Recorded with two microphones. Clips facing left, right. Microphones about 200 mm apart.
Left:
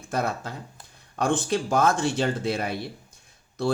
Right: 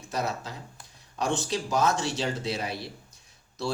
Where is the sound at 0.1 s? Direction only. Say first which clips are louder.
Left 3 dB; 55° left (ahead or behind).